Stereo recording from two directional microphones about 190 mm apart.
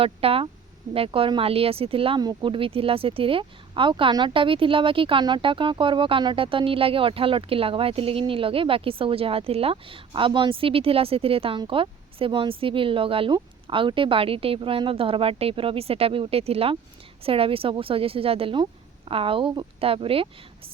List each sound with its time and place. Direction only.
0.0 s speech: 30° right (ahead or behind)